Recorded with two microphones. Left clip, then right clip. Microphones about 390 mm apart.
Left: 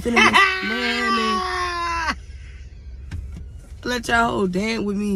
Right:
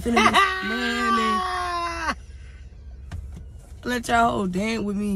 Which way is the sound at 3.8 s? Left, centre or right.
Centre.